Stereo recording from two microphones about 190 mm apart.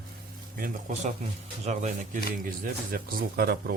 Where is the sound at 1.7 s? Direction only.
40° right (ahead or behind).